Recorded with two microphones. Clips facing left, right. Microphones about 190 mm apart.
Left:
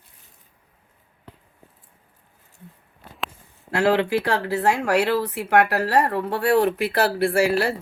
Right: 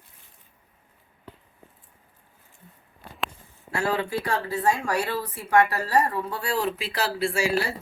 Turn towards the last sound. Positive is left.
turn(degrees=60)  # may be behind; listen again after turning